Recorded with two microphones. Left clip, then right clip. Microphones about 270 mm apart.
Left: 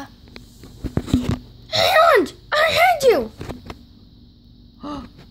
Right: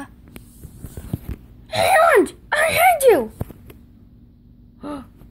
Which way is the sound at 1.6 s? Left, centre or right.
Centre.